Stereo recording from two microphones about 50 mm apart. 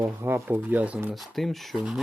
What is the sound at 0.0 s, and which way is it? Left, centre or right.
Speech, right.